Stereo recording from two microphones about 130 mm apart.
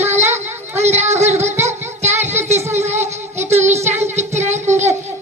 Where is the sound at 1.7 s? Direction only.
20° right (ahead or behind).